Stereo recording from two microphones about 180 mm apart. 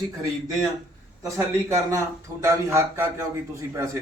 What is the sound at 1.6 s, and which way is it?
A man's voice, 15° right (ahead or behind).